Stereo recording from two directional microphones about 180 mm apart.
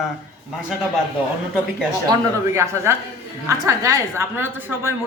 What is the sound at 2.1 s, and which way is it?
A woman's voice, 15° right (ahead or behind).